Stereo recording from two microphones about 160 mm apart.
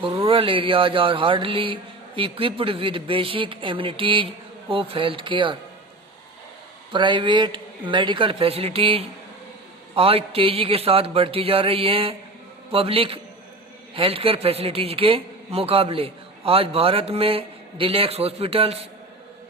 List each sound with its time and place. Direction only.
0.3 s a man's voice: 35° right (ahead or behind)
6.9 s a man's voice: 30° right (ahead or behind)